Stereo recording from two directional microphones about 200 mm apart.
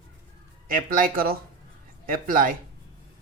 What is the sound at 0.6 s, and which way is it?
Speech, 45° right (ahead or behind).